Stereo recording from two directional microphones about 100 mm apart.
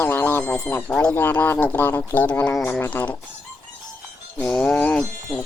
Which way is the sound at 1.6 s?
20° left (ahead or behind).